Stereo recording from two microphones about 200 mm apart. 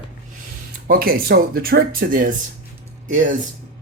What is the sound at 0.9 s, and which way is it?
Speech, 50° right (ahead or behind).